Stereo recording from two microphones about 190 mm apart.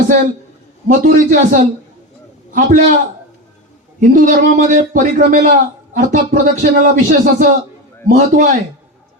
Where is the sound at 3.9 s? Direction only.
40° right (ahead or behind).